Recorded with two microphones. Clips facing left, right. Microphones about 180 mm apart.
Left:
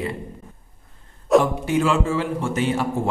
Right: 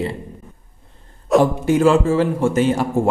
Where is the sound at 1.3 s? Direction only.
Centre (ahead or behind).